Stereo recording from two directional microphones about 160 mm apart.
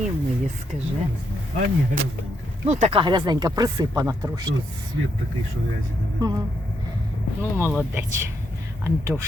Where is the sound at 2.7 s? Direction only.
45° right (ahead or behind).